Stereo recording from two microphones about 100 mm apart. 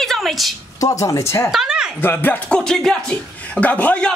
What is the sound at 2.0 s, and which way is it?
Speech, 20° left (ahead or behind).